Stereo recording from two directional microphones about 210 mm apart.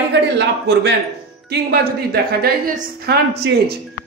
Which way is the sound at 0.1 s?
55° right (ahead or behind).